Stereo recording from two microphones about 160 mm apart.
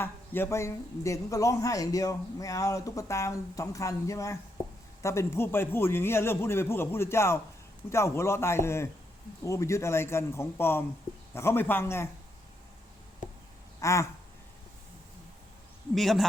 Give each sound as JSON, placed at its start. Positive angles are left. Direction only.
{"t": 0.0, "sound": "a man's voice", "side_deg": 15}
{"t": 13.7, "sound": "a sound", "side_deg": 20}
{"t": 16.0, "sound": "a man's voice", "side_deg": 0}